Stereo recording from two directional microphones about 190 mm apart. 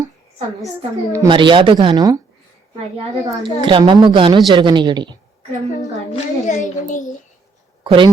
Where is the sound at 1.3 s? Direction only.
25° right (ahead or behind).